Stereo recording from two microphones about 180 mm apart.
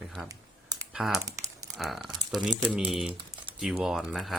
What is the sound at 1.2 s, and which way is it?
Crumpling, 15° right (ahead or behind).